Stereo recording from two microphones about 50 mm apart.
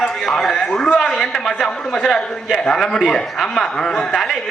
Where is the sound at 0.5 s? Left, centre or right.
Centre.